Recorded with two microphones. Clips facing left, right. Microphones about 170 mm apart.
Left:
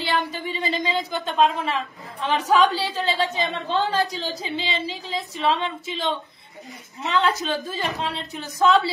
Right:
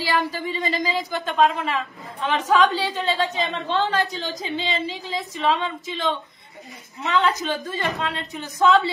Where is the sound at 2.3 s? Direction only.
35° left (ahead or behind).